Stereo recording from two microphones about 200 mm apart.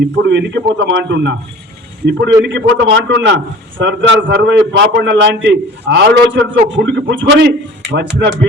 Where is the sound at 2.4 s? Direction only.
65° right (ahead or behind).